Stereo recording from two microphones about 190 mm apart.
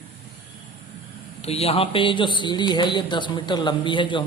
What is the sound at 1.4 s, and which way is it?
Speech, 30° left (ahead or behind).